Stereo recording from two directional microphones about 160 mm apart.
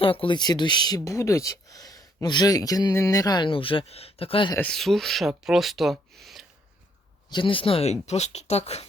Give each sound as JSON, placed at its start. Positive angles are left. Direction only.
{"t": 0.0, "sound": "speech", "side_deg": 35}
{"t": 4.5, "sound": "speech", "side_deg": 5}
{"t": 7.3, "sound": "speech", "side_deg": 30}